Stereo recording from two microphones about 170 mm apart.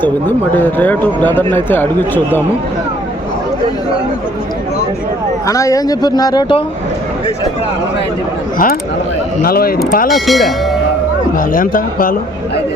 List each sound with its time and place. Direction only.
0.0 s speech: 10° left (ahead or behind)
5.5 s speech: 20° left (ahead or behind)
8.5 s speech: 60° left (ahead or behind)
10.1 s speech: centre (ahead or behind)
11.3 s speech: 55° left (ahead or behind)